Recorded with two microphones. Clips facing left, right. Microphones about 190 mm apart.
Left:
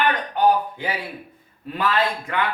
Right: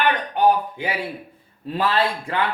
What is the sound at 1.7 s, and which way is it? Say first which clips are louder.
Speech: right 1 dB; 30° right (ahead or behind).